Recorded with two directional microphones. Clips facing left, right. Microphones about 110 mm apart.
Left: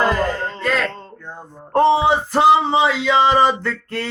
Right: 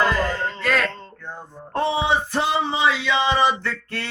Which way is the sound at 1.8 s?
35° left (ahead or behind).